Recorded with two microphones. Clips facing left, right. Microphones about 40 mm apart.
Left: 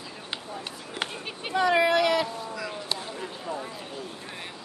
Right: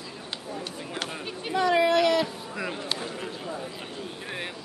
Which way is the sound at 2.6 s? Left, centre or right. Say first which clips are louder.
Right 6 dB; right.